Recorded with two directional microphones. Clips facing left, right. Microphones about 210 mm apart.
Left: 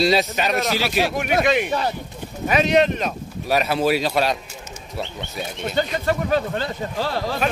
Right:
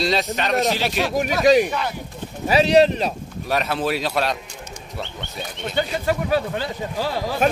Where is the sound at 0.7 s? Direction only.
40° right (ahead or behind).